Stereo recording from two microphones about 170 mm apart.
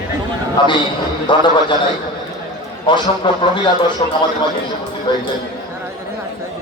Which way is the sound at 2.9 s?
30° left (ahead or behind).